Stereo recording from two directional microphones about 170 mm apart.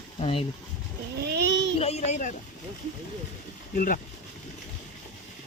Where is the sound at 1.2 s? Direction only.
80° right.